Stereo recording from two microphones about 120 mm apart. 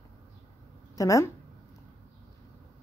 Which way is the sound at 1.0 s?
25° left (ahead or behind).